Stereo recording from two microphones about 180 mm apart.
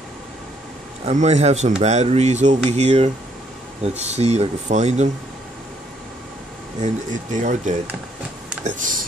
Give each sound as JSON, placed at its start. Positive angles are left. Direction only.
{"t": 1.0, "sound": "speech", "side_deg": -40}
{"t": 6.8, "sound": "speech", "side_deg": -45}